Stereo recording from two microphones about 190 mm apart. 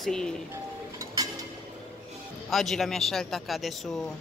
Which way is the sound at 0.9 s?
20° right (ahead or behind).